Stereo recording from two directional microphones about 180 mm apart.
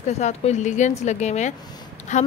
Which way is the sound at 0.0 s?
40° left (ahead or behind).